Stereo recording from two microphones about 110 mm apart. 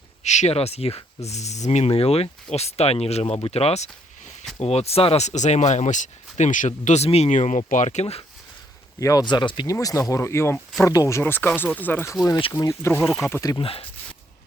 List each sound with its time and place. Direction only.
0.2 s speech: 90° left
3.4 s speech: 65° left (ahead or behind)
9.0 s speech: 30° left (ahead or behind)
9.2 s speech: 45° left (ahead or behind)
9.7 s speech: 30° left (ahead or behind)
11.2 s speech: 20° left (ahead or behind)
12.5 s speech: 30° left (ahead or behind)
13.6 s speech: 60° left (ahead or behind)